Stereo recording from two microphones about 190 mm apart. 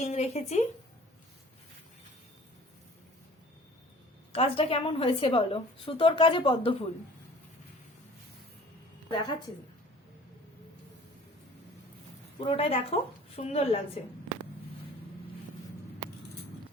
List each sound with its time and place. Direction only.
0.0 s a woman's voice: 35° left (ahead or behind)
4.3 s a woman's voice: 30° left (ahead or behind)
9.0 s a woman's voice: 25° left (ahead or behind)
12.5 s a woman's voice: 30° left (ahead or behind)